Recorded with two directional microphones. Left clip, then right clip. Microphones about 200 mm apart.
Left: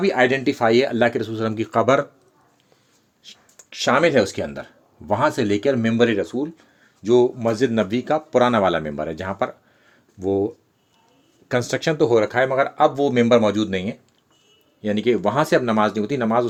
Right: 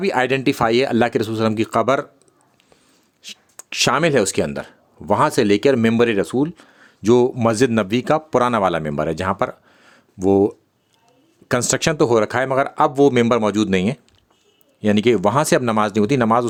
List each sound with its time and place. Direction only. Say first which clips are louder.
0.0 s speech: even; 40° right (ahead or behind)
3.2 s speech: right 8 dB; 40° right (ahead or behind)